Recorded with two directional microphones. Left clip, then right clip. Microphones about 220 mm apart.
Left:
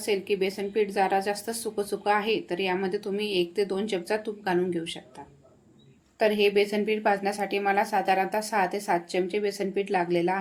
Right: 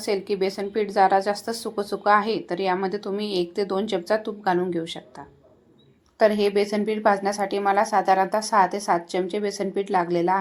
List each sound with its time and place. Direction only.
0.0 s a woman's voice: 15° right (ahead or behind)
6.1 s a woman's voice: 15° right (ahead or behind)